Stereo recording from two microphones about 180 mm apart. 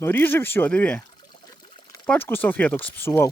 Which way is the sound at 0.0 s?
10° left (ahead or behind).